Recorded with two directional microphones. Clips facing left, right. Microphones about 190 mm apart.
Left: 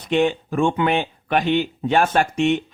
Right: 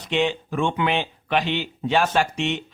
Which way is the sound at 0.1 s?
50° left (ahead or behind).